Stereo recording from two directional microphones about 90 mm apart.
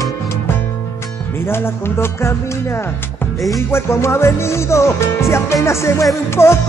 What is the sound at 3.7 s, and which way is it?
Music, 30° left (ahead or behind).